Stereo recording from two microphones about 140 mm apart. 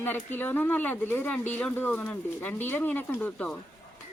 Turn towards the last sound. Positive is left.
turn(degrees=10)  # may be behind; listen again after turning